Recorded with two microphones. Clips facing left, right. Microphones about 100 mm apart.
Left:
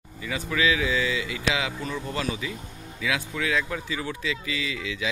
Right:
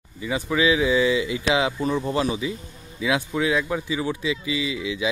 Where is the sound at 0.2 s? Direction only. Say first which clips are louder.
Right 4 dB; 20° right (ahead or behind).